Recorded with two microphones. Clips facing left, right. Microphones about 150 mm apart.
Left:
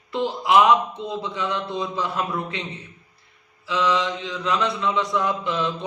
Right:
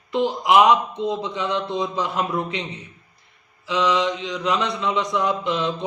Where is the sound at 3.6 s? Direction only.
20° right (ahead or behind).